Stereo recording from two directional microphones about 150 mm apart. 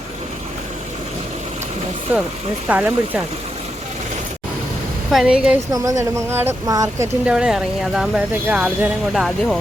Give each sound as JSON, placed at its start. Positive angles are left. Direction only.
{"t": 2.6, "sound": "speech", "side_deg": -5}
{"t": 5.1, "sound": "speech", "side_deg": -5}
{"t": 5.7, "sound": "speech", "side_deg": -20}
{"t": 7.3, "sound": "speech", "side_deg": -5}